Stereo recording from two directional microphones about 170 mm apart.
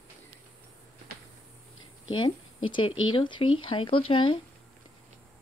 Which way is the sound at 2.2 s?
30° left (ahead or behind).